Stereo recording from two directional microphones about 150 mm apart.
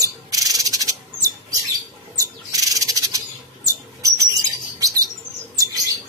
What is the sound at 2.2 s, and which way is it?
Bird, 20° right (ahead or behind).